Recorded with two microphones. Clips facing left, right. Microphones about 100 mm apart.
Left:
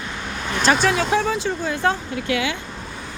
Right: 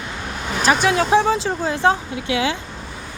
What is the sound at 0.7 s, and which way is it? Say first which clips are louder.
Speech: right 1 dB; 10° right (ahead or behind).